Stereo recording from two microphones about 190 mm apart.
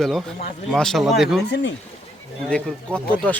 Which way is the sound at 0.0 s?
Centre (ahead or behind).